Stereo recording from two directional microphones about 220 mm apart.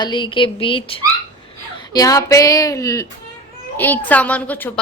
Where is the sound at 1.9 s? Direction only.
15° left (ahead or behind).